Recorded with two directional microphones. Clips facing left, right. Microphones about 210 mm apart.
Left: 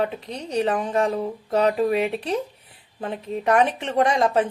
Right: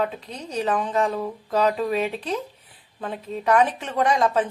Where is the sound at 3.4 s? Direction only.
25° left (ahead or behind).